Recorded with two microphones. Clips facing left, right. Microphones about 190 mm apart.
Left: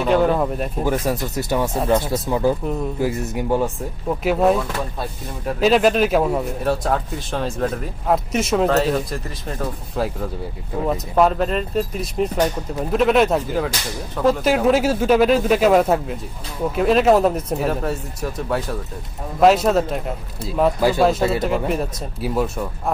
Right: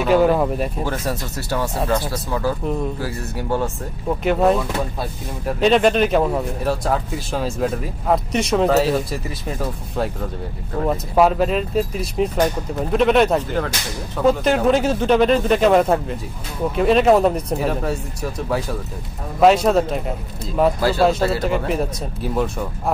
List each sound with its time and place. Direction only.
0.0 s speech: 5° right (ahead or behind)
0.8 s speech: 15° left (ahead or behind)
4.2 s speech: 5° left (ahead or behind)